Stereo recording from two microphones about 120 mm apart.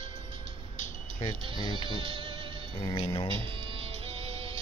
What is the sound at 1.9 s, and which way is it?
Music, 45° right (ahead or behind).